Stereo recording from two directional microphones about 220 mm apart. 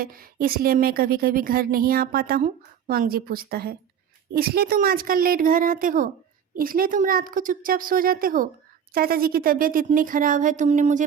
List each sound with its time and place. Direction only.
0.0 s speech: 40° right (ahead or behind)